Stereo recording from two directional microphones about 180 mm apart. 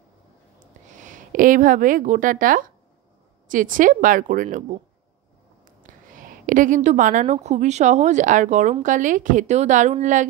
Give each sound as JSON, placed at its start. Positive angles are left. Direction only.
{"t": 0.9, "sound": "a woman's voice", "side_deg": -45}
{"t": 6.1, "sound": "a woman's voice", "side_deg": -50}